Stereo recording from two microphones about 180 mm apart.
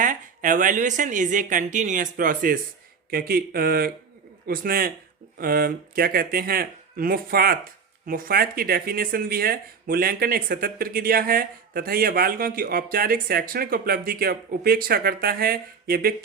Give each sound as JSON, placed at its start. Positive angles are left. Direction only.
{"t": 0.0, "sound": "speech", "side_deg": -45}